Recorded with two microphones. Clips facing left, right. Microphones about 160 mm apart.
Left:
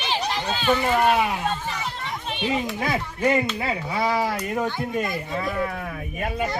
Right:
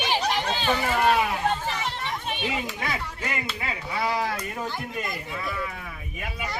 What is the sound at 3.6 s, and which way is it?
Speech, 35° left (ahead or behind).